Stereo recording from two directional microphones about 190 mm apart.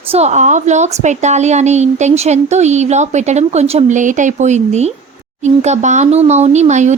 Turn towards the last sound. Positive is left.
turn(degrees=-40)  # may be behind; listen again after turning